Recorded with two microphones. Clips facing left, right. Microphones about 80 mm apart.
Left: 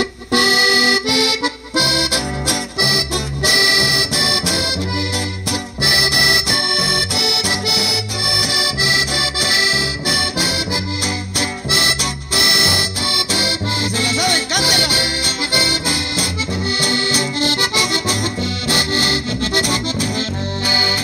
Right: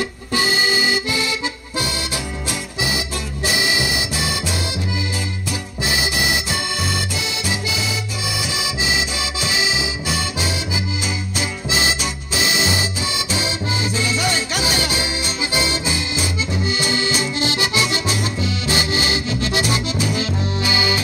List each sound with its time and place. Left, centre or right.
0.3 s accordion: left
5.8 s accordion: left
11.3 s music: left
16.7 s accordion: left